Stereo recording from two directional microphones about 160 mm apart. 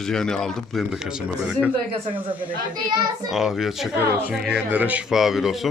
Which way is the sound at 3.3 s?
Centre (ahead or behind).